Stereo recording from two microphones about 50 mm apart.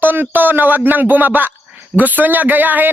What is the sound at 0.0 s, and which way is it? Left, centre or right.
A man's voice, right.